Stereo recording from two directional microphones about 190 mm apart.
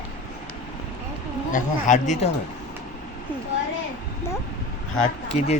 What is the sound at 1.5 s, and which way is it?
Speech, 40° left (ahead or behind).